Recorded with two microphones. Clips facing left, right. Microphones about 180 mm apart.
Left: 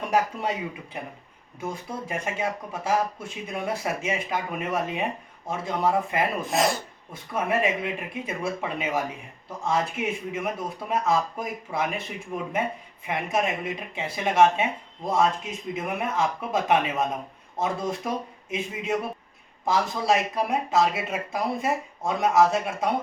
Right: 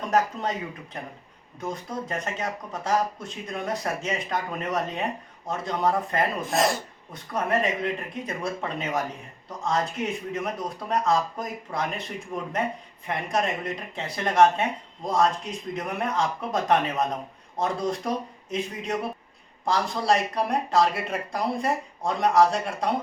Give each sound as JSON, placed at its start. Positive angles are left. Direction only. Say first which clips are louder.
{"t": 0.1, "sound": "speech", "louder": "right 1 dB", "side_deg": 10}